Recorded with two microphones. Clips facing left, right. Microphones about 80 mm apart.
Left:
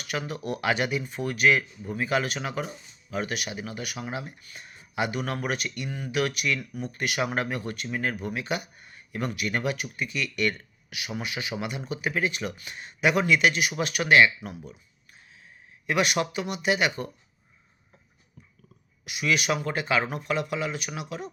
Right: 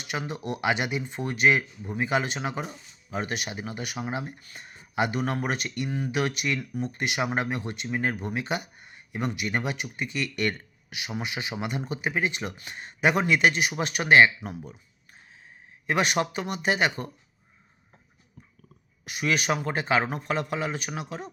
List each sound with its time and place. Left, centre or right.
0.0 s speech: right
15.9 s speech: right
18.4 s a sound: right
19.0 s speech: right